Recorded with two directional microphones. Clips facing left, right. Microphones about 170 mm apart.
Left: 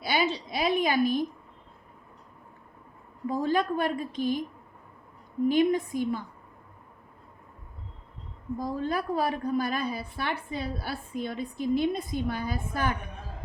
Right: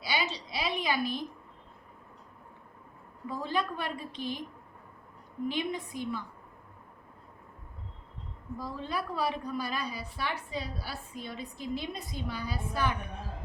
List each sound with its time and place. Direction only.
0.0 s a sound: 50° left (ahead or behind)
3.2 s a woman's voice: 45° left (ahead or behind)
5.5 s a woman's voice: 45° left (ahead or behind)
8.5 s a woman's voice: 45° left (ahead or behind)